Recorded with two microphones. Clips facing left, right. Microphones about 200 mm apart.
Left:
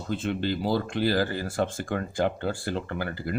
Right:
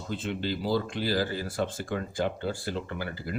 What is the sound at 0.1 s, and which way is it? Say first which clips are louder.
Speech: left 4 dB; 55° left (ahead or behind).